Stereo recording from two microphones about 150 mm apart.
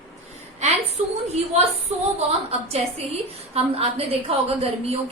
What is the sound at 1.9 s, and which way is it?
A woman's voice, 45° right (ahead or behind).